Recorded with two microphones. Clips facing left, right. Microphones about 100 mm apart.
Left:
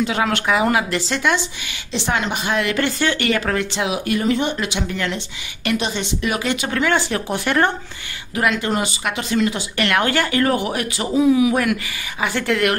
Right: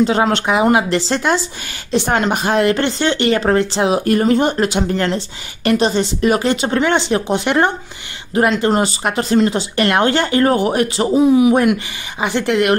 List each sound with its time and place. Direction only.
0.0 s speech: 30° right (ahead or behind)
8.4 s speech: 35° right (ahead or behind)